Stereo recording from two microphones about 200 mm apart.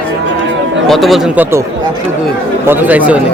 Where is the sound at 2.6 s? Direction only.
10° right (ahead or behind).